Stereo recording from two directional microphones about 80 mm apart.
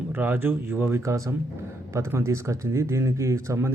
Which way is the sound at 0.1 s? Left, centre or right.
Right.